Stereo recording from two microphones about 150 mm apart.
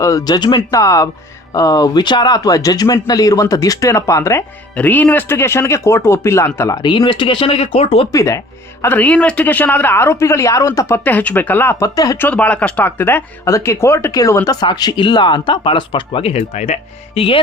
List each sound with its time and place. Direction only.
0.0 s speech: 20° left (ahead or behind); by 8.0 s 40° left (ahead or behind)
8.1 s speech: 20° left (ahead or behind)
12.3 s speech: 10° left (ahead or behind); by 17.4 s 40° left (ahead or behind)